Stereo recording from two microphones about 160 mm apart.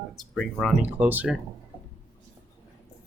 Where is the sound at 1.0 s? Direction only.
10° right (ahead or behind).